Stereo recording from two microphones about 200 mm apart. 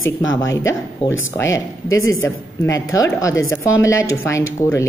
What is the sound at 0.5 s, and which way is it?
Speech, 15° left (ahead or behind).